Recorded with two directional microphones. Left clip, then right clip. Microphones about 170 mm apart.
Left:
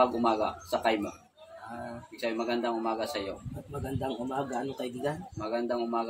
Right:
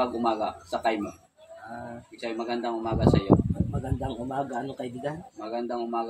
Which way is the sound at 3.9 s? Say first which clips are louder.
Right 1 dB; 30° right (ahead or behind).